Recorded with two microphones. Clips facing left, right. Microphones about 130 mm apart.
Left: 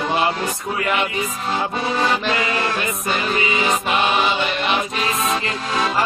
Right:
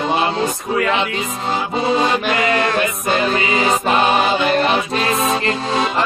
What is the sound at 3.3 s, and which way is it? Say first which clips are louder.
Music: right 3 dB; 40° right (ahead or behind).